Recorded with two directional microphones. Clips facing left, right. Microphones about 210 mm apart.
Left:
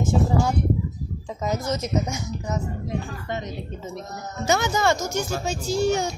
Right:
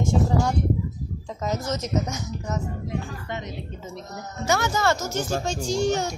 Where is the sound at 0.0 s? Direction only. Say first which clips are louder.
Left 1 dB; 5° left (ahead or behind).